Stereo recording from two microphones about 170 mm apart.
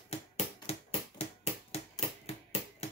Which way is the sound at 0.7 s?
35° left (ahead or behind).